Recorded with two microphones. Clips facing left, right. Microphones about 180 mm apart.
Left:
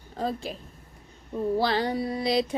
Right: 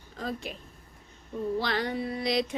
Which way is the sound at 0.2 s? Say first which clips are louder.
Left 5 dB; 30° left (ahead or behind).